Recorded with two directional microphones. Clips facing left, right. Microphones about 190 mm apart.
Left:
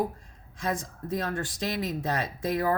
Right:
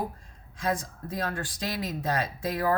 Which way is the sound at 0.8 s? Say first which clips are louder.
Left 2 dB; 20° left (ahead or behind).